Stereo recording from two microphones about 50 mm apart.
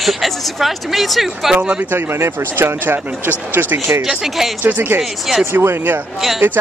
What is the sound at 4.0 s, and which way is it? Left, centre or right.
Speech, centre.